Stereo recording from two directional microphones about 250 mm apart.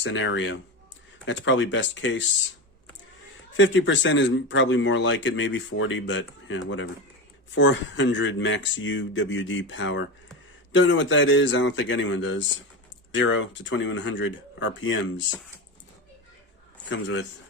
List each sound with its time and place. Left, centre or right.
0.0 s speech: left
3.6 s speech: left